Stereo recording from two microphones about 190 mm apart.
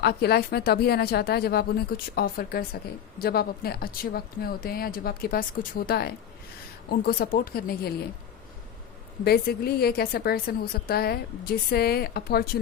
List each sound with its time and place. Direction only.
0.0 s a woman's voice: 55° left (ahead or behind)
9.2 s a woman's voice: 55° left (ahead or behind)